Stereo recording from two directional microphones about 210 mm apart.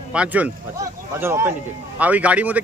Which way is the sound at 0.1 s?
5° right (ahead or behind).